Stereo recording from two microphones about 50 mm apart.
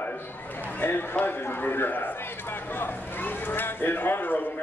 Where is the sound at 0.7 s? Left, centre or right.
Left.